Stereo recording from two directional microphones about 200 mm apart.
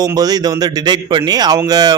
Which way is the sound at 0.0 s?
20° right (ahead or behind).